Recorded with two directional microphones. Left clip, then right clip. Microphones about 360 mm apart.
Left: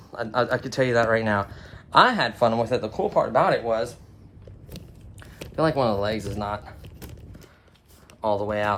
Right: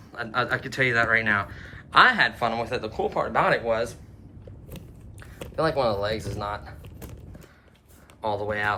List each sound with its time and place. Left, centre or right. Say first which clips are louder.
0.1 s speech: left 2 dB; centre
5.5 s speech: left 1 dB; centre
8.2 s speech: left 2 dB; centre